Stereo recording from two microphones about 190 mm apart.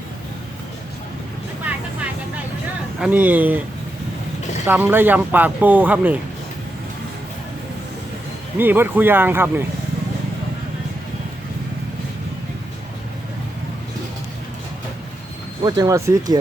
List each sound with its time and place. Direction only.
3.0 s speech: 10° right (ahead or behind)
4.6 s speech: 10° right (ahead or behind)
8.5 s speech: 10° right (ahead or behind)
15.6 s speech: 20° right (ahead or behind)